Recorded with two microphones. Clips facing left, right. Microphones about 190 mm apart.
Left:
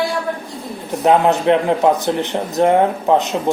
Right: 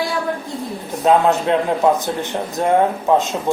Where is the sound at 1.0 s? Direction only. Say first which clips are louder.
Left 2 dB; 20° left (ahead or behind).